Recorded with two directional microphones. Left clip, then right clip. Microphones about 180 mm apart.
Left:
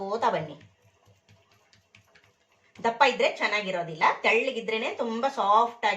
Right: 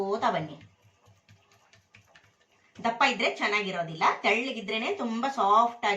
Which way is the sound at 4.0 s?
20° left (ahead or behind).